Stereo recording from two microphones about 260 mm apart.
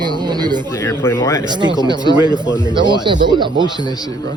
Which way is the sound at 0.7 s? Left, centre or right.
Centre.